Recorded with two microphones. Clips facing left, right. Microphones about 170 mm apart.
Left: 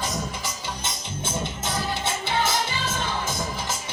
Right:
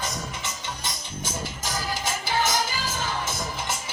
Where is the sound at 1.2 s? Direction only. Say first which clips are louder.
Left 3 dB; 25° left (ahead or behind).